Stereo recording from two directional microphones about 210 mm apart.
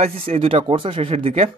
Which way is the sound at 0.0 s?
30° right (ahead or behind).